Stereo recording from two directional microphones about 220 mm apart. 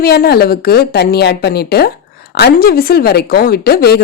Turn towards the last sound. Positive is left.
turn(degrees=45)  # may be behind; listen again after turning